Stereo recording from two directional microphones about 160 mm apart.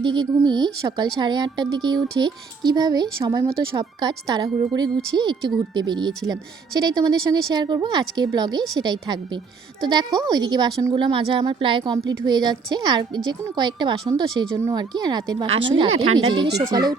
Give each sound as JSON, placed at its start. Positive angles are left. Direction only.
{"t": 0.0, "sound": "a woman's voice", "side_deg": -30}